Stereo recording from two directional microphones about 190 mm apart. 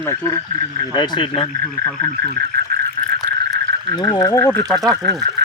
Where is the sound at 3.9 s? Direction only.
20° left (ahead or behind).